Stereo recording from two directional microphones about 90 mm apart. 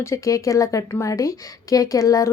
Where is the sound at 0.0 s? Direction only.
35° left (ahead or behind).